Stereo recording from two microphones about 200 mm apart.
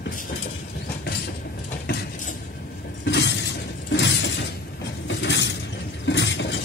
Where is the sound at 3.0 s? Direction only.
60° left (ahead or behind).